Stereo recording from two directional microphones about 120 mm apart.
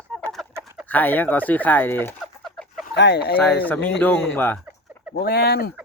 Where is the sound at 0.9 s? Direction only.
15° left (ahead or behind).